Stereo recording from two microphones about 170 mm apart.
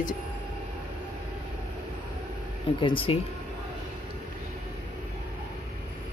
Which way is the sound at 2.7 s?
30° left (ahead or behind).